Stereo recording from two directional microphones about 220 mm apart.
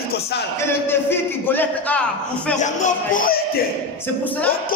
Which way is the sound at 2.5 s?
35° left (ahead or behind).